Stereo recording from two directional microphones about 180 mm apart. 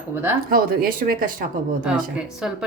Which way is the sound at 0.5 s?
55° right (ahead or behind).